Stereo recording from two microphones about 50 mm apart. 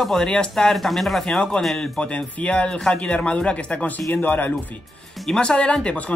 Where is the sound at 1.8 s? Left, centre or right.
Left.